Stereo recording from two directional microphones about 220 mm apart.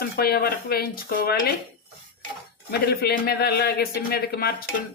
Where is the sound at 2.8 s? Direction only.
45° left (ahead or behind).